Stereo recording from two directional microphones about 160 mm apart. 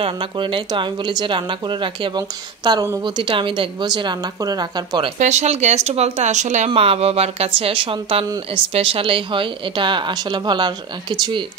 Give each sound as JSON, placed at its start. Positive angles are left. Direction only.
{"t": 0.0, "sound": "speech", "side_deg": -30}
{"t": 5.2, "sound": "speech", "side_deg": -45}